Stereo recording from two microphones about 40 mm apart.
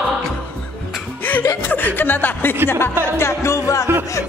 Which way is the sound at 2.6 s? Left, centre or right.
Left.